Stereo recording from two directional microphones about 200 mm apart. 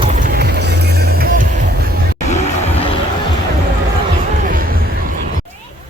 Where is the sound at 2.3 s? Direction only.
35° left (ahead or behind).